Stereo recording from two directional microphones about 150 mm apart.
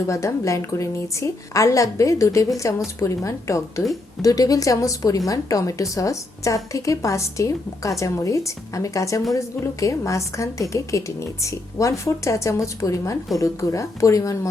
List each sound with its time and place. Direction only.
0.1 s speech: 20° left (ahead or behind)